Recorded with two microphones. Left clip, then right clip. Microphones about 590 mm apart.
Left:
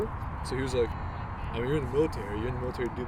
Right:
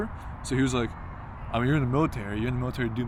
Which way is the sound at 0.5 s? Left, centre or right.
Right.